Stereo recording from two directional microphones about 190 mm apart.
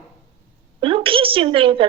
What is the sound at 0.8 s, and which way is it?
A woman's voice, 30° right (ahead or behind).